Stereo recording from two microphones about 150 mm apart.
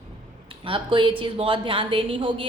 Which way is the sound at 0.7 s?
35° right (ahead or behind).